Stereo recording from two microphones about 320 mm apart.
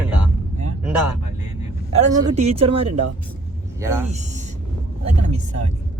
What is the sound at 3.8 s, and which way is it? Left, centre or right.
Speech, centre.